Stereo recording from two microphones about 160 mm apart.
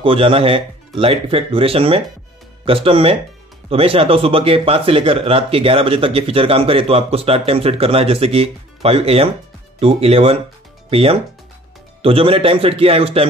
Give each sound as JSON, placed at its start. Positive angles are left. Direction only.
{"t": 0.0, "sound": "speech", "side_deg": -35}